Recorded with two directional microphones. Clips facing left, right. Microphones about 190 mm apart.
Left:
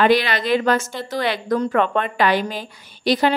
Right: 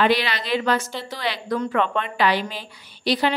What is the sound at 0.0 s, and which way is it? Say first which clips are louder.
A woman's voice: left 4 dB; 50° left (ahead or behind).